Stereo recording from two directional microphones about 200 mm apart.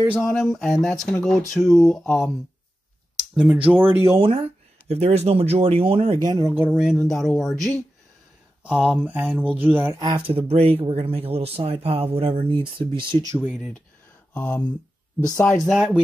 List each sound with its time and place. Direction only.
0.1 s speech: centre (ahead or behind)
3.9 s speech: 15° right (ahead or behind)
4.8 s speech: 30° right (ahead or behind); by 9.8 s 10° right (ahead or behind)
9.9 s speech: 25° right (ahead or behind)
13.4 s speech: centre (ahead or behind)
14.3 s speech: 10° left (ahead or behind)